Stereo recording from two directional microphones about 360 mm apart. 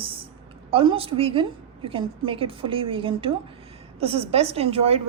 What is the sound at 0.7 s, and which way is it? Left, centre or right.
A woman's voice, centre.